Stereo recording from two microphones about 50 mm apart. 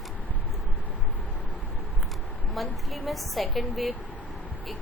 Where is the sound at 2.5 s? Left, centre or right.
Centre.